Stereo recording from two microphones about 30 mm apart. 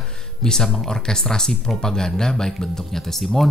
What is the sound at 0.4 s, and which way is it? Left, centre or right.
Speech, left.